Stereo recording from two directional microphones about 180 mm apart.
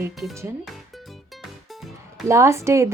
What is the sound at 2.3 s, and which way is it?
Speech, 15° right (ahead or behind).